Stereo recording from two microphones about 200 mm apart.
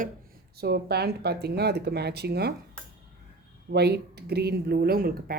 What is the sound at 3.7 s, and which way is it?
Speech, 55° right (ahead or behind).